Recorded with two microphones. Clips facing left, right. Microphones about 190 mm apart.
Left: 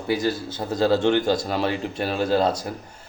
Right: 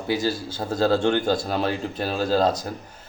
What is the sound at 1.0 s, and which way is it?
Speech, 10° right (ahead or behind).